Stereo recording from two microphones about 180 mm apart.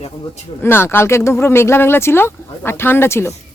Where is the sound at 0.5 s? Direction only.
10° left (ahead or behind).